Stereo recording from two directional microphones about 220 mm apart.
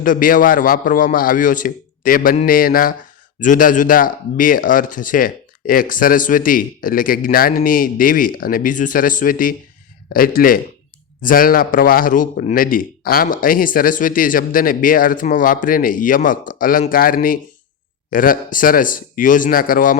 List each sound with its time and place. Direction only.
0.0 s a man's voice: 40° left (ahead or behind)